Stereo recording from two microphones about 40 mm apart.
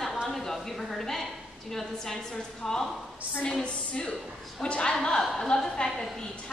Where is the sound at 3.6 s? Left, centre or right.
Left.